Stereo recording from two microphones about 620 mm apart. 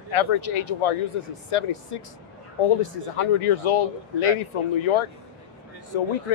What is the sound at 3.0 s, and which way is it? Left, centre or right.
Speech, left.